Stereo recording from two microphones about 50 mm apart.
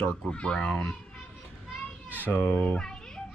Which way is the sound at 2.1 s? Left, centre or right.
Right.